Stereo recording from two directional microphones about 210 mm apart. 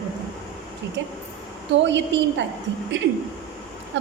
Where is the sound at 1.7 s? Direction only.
60° right (ahead or behind).